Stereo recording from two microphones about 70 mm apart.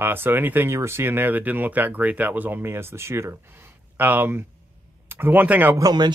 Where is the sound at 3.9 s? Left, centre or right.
Right.